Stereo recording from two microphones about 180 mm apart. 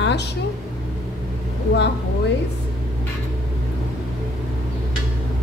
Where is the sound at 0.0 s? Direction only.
70° left (ahead or behind).